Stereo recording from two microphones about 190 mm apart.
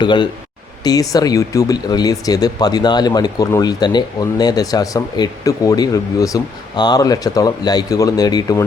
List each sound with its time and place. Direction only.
0.0 s speech: 25° left (ahead or behind)